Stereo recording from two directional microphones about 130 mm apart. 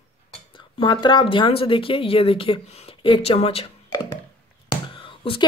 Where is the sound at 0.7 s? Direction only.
35° left (ahead or behind).